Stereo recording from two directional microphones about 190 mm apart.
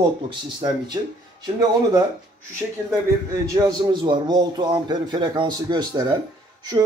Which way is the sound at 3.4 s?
15° right (ahead or behind).